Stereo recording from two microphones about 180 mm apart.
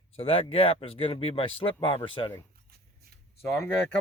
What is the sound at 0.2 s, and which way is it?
Speech, 30° left (ahead or behind).